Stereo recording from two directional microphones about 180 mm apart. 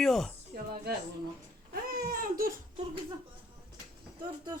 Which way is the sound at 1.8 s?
55° right (ahead or behind).